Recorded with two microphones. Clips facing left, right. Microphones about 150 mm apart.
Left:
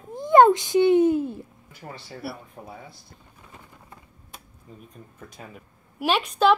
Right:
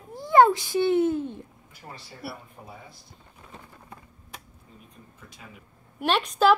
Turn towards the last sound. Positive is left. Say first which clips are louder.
# left 1 dB
turn(degrees=0)  # may be behind; listen again after turning